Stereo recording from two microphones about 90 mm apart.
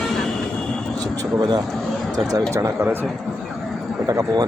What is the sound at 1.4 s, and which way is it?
Speech, 50° right (ahead or behind).